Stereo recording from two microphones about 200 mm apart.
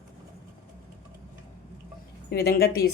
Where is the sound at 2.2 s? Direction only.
50° left (ahead or behind).